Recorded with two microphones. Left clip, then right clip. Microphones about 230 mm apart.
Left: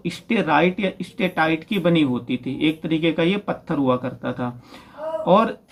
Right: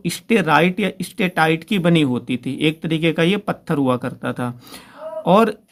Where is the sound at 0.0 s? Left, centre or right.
Right.